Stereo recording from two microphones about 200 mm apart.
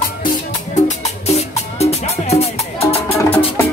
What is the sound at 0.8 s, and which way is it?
Music, 35° left (ahead or behind).